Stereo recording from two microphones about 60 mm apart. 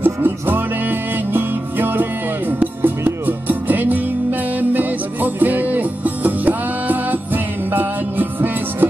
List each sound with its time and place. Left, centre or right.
0.0 s music: right